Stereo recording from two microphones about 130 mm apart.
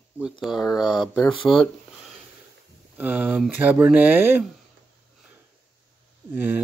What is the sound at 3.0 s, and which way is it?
Speech, 10° right (ahead or behind).